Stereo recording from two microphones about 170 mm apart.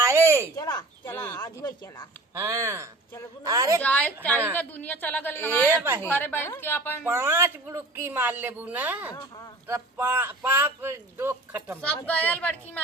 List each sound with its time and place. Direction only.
0.0 s a sound: 15° right (ahead or behind)
0.5 s speech: 20° left (ahead or behind)
2.3 s a woman's voice: 15° right (ahead or behind)
3.8 s a woman's voice: 5° left (ahead or behind)
5.6 s a woman's voice: 15° right (ahead or behind)
6.0 s a woman's voice: 10° left (ahead or behind)
7.0 s a woman's voice: 15° right (ahead or behind)
12.0 s a woman's voice: 10° left (ahead or behind)